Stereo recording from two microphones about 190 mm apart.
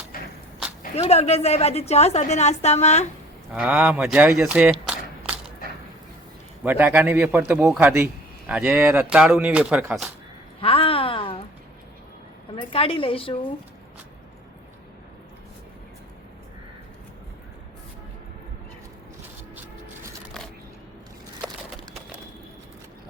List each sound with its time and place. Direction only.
0.1 s a sound: 50° left (ahead or behind)
0.9 s a woman's voice: 35° left (ahead or behind)
3.5 s a man's voice: 10° right (ahead or behind)
6.6 s a man's voice: 10° right (ahead or behind)
10.6 s a sound: 30° left (ahead or behind)
12.5 s a woman's voice: 30° left (ahead or behind)